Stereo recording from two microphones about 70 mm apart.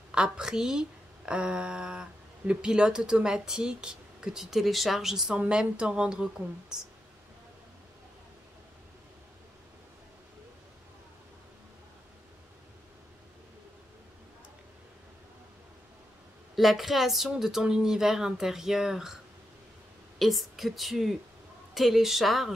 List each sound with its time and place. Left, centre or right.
0.1 s a woman's voice: centre
16.5 s speech: centre
20.2 s speech: centre